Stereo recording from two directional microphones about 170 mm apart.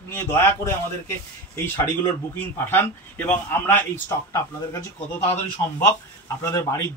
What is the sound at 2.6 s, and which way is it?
A man's voice, 10° left (ahead or behind).